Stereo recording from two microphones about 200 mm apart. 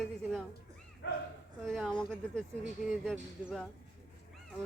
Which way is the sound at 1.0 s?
55° left (ahead or behind).